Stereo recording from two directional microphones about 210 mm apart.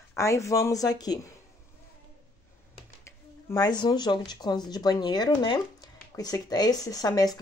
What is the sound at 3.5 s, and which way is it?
Speech, 20° left (ahead or behind).